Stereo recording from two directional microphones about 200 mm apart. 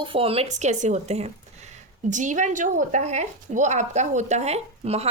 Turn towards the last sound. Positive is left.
turn(degrees=-30)  # may be behind; listen again after turning